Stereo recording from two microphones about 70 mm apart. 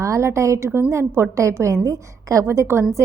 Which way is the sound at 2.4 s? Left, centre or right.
Right.